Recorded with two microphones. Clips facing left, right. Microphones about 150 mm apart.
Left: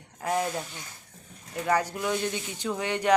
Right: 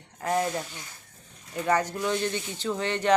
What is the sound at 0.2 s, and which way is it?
Speech, 5° left (ahead or behind).